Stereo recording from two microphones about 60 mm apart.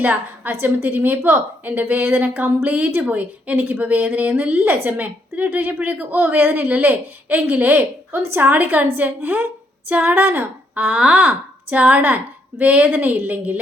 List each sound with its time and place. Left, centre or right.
0.0 s a woman's voice: right